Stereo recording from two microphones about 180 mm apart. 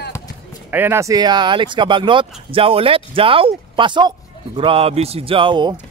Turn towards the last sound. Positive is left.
turn(degrees=-25)  # may be behind; listen again after turning